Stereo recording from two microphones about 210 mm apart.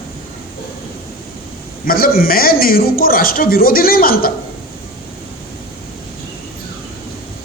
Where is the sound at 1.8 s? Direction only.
45° left (ahead or behind).